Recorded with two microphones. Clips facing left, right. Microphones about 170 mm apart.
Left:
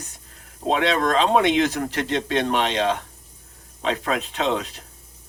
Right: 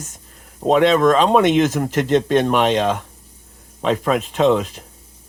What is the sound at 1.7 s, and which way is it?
Speech, 45° right (ahead or behind).